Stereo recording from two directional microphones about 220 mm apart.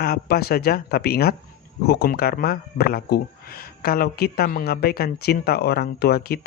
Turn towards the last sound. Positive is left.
turn(degrees=45)  # may be behind; listen again after turning